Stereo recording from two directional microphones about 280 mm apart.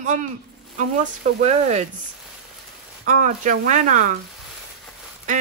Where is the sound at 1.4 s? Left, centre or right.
Right.